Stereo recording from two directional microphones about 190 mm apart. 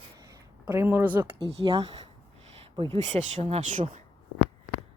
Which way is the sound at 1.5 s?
30° right (ahead or behind).